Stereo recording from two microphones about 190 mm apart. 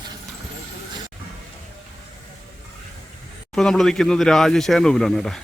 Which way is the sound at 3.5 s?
Centre (ahead or behind).